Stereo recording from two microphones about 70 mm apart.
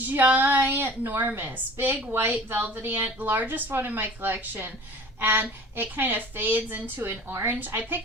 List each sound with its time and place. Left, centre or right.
0.0 s speech: right